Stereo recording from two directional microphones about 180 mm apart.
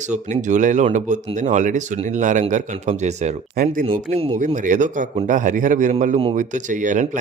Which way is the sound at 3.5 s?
50° right (ahead or behind).